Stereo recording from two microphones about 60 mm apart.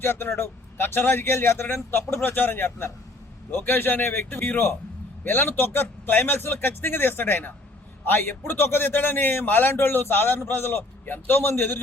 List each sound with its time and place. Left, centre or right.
0.0 s a man's voice: left